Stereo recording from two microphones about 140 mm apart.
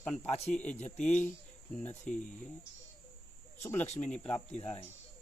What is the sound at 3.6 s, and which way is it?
Speech, 15° left (ahead or behind).